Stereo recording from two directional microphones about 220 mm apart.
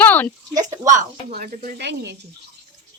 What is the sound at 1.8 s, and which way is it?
Speech, 50° right (ahead or behind).